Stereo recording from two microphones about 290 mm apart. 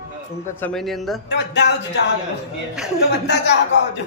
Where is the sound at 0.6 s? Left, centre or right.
Centre.